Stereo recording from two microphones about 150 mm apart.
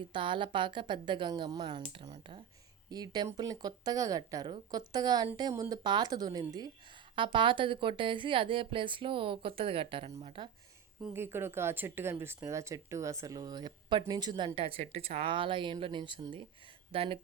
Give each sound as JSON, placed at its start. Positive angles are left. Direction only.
{"t": 0.0, "sound": "a woman's voice", "side_deg": -35}
{"t": 11.1, "sound": "a woman's voice", "side_deg": -15}